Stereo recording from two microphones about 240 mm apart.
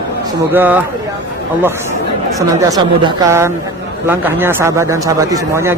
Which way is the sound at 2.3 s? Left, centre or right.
Centre.